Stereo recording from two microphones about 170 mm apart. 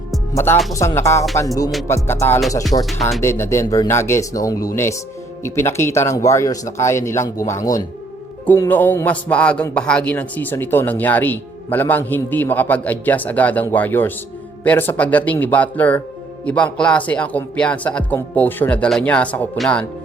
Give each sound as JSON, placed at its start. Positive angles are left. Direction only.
{"t": 0.3, "sound": "a man's voice", "side_deg": 15}
{"t": 2.7, "sound": "speech", "side_deg": 35}
{"t": 3.2, "sound": "a man's voice", "side_deg": 15}